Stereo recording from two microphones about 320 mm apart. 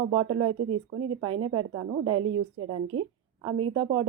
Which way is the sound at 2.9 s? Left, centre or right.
Right.